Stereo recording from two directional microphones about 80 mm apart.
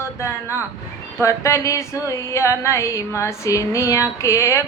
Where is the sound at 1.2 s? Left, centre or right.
Left.